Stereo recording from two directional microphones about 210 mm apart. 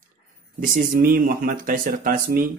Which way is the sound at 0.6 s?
40° right (ahead or behind).